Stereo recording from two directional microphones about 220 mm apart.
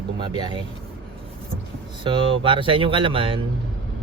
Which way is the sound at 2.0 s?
20° right (ahead or behind).